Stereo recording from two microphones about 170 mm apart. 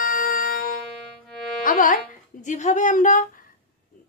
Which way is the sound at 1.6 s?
50° left (ahead or behind).